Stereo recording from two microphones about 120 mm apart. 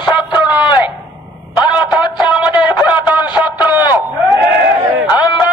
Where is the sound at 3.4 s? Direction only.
15° right (ahead or behind).